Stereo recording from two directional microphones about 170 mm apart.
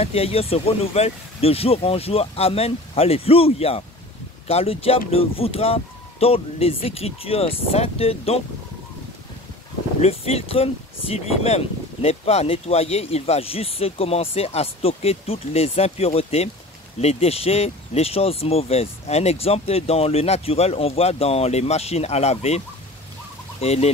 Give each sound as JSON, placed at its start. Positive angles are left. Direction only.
{"t": 0.0, "sound": "speech", "side_deg": 35}
{"t": 10.0, "sound": "speech", "side_deg": 35}
{"t": 23.6, "sound": "speech", "side_deg": 40}